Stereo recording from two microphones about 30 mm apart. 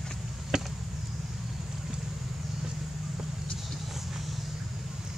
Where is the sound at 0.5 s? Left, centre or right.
Right.